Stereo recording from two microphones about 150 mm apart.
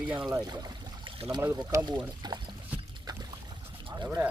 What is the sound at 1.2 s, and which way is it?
Speech, 20° right (ahead or behind).